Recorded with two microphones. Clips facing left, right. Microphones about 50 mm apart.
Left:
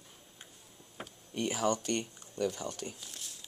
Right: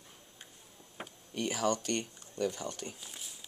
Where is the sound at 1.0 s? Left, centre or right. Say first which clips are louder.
Even; centre.